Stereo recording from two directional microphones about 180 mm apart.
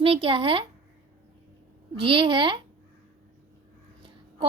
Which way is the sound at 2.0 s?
30° right (ahead or behind).